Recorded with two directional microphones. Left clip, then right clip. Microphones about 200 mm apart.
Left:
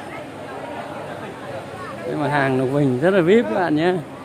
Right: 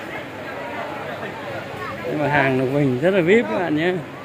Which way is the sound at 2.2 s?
10° left (ahead or behind).